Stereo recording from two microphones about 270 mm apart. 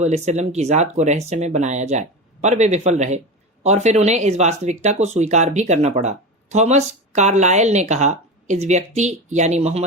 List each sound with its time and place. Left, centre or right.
0.0 s speech: right